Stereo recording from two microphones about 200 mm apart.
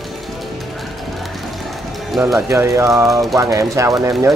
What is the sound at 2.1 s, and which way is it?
Speech, 5° right (ahead or behind).